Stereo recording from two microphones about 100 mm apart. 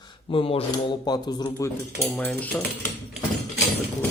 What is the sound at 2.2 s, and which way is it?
Speech, 15° left (ahead or behind).